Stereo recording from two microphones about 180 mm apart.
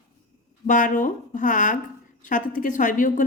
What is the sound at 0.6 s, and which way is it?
A woman's voice, 45° left (ahead or behind).